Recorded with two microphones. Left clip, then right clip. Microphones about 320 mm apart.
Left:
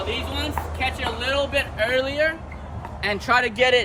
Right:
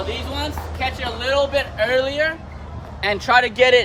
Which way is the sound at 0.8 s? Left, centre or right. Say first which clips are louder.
Right 2 dB; centre.